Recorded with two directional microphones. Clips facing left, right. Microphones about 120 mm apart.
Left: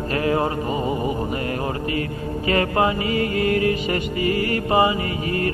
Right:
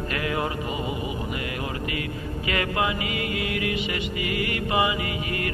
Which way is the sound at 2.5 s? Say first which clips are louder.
Left 6 dB; 35° left (ahead or behind).